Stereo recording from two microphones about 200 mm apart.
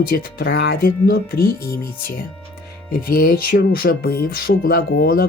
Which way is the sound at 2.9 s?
45° left (ahead or behind).